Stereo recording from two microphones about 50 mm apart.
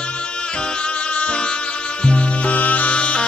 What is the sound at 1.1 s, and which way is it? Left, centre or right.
Music, left.